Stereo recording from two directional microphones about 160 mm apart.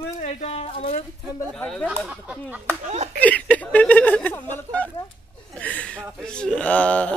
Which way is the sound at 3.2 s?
10° left (ahead or behind).